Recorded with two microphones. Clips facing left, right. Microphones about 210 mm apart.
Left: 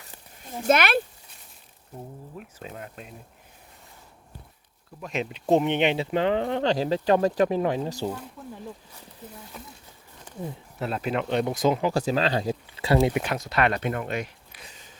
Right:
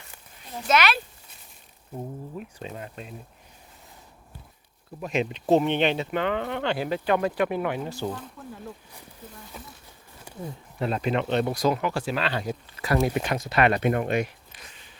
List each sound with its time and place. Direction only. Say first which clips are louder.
0.7 s speech: left 2 dB; 55° left (ahead or behind)
2.4 s speech: right 2 dB; 5° left (ahead or behind)
4.9 s speech: right 4 dB; 5° right (ahead or behind)
5.5 s speech: even; 15° left (ahead or behind); by 8.0 s 35° left (ahead or behind)
8.0 s speech: left 1 dB; 10° left (ahead or behind)
9.5 s speech: right 1 dB; centre (ahead or behind)
10.3 s a sound: left 1 dB; 10° right (ahead or behind)
10.8 s speech: right 2 dB; 5° left (ahead or behind); by 11.9 s 20° left (ahead or behind)
11.9 s speech: left 4 dB; 35° left (ahead or behind)
13.1 s speech: right 1 dB; 5° left (ahead or behind); by 14.3 s 15° right (ahead or behind)